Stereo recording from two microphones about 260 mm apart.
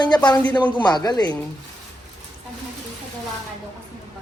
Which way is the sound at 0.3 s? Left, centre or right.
Centre.